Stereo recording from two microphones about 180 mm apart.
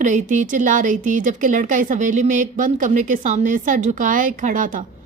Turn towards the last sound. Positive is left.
turn(degrees=-50)  # may be behind; listen again after turning